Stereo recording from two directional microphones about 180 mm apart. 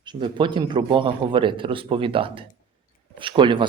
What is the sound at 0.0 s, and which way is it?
Speech, 25° right (ahead or behind).